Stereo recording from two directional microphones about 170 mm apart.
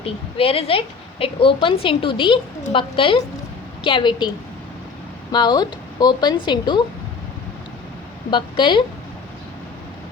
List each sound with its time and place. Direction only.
0.0 s a woman's voice: 35° left (ahead or behind)
5.3 s a woman's voice: 25° left (ahead or behind)
8.3 s a woman's voice: 30° left (ahead or behind)